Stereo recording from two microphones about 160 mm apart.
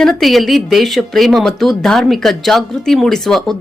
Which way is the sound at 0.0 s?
Centre (ahead or behind).